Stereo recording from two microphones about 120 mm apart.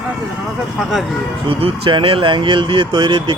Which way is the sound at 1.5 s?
45° right (ahead or behind).